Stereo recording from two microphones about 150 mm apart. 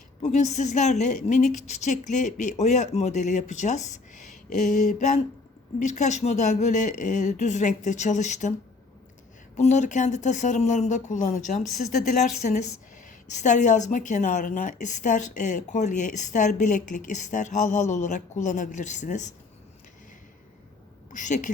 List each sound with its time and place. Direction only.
0.2 s speech: 50° left (ahead or behind)
9.6 s a woman's voice: 50° left (ahead or behind)
21.1 s a woman's voice: 55° left (ahead or behind)